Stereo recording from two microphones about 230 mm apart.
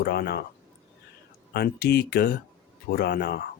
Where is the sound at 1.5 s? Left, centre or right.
Left.